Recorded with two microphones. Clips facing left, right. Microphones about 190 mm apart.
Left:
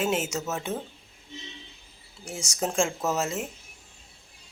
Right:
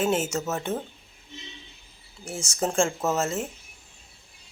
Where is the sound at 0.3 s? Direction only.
Centre (ahead or behind).